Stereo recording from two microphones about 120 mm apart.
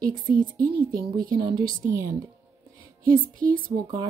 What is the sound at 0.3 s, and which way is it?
Speech, 35° right (ahead or behind).